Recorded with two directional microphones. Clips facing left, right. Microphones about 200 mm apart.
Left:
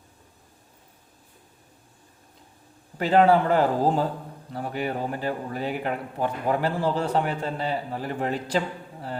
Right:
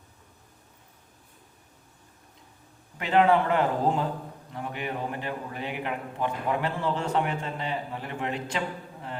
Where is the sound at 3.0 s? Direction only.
35° left (ahead or behind).